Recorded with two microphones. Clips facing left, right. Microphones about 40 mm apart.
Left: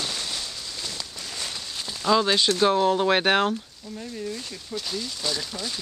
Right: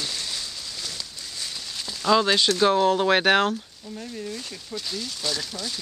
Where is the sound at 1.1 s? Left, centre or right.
Left.